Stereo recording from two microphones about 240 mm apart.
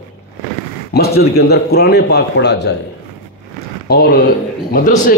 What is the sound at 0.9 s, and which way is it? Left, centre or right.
Speech, left.